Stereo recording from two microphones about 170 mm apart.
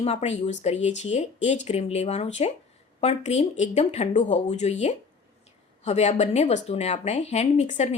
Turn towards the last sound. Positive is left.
turn(degrees=40)  # may be behind; listen again after turning